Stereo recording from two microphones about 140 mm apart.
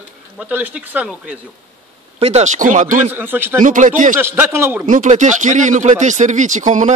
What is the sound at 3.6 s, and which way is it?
Speech, 70° right (ahead or behind).